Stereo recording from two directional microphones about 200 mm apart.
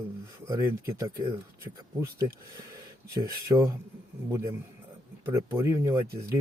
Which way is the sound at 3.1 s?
20° right (ahead or behind).